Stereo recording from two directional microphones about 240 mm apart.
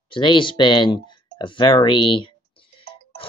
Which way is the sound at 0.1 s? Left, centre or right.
Centre.